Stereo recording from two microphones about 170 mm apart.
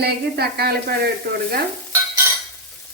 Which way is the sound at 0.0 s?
70° right (ahead or behind).